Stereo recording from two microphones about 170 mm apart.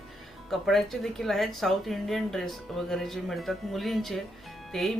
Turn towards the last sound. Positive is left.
turn(degrees=0)  # may be behind; listen again after turning